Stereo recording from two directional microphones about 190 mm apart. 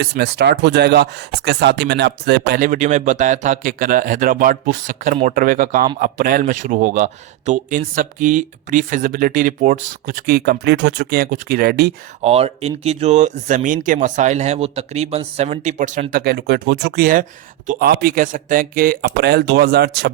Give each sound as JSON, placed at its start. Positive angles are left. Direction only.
{"t": 0.0, "sound": "speech", "side_deg": -60}
{"t": 12.2, "sound": "speech", "side_deg": -35}
{"t": 16.1, "sound": "speech", "side_deg": -55}